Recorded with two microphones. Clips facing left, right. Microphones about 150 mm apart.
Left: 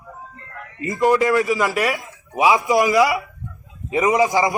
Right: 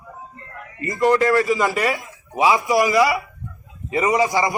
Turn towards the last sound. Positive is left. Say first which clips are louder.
# left 2 dB
turn(degrees=15)  # may be behind; listen again after turning